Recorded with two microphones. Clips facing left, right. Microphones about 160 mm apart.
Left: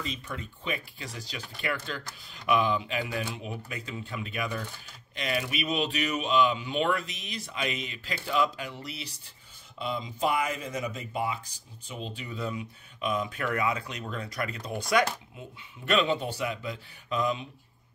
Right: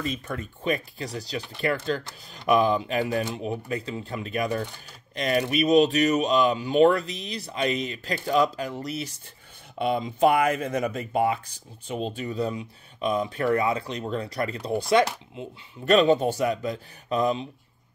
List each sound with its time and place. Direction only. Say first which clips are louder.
0.0 s speech: right 6 dB; 50° right (ahead or behind)
9.8 s speech: right 9 dB; 60° right (ahead or behind); by 15.0 s 30° right (ahead or behind)
15.8 s speech: right 7 dB; 40° right (ahead or behind)